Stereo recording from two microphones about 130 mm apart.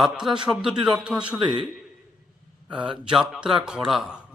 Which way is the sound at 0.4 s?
5° right (ahead or behind).